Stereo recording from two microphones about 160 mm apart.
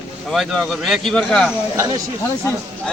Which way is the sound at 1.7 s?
20° right (ahead or behind).